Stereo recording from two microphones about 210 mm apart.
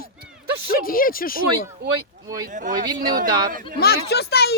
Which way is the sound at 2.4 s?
35° right (ahead or behind).